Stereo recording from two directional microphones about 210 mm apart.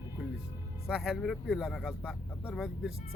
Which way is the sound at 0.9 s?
Centre (ahead or behind).